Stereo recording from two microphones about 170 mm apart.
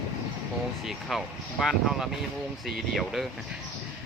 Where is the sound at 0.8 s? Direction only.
Centre (ahead or behind).